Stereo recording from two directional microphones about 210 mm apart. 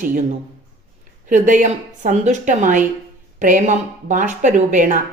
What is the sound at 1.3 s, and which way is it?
Speech, 35° right (ahead or behind).